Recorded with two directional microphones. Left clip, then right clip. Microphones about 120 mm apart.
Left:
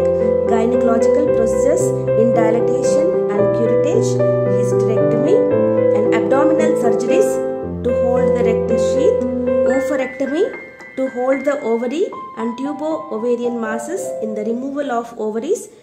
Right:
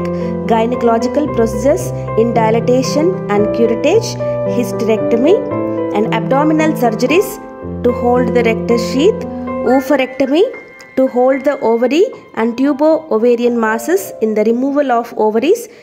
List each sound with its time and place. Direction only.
0.0 s speech: 45° right (ahead or behind)
5.9 s speech: 45° right (ahead or behind)
9.8 s speech: 40° right (ahead or behind)